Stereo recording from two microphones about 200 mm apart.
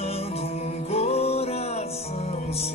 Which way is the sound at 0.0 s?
30° left (ahead or behind).